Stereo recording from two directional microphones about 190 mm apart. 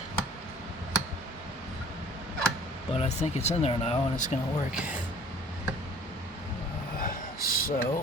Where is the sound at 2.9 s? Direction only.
35° left (ahead or behind).